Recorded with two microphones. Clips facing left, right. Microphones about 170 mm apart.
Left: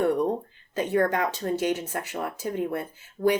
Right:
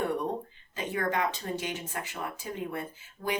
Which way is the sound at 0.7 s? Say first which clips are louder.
Left 7 dB; 45° left (ahead or behind).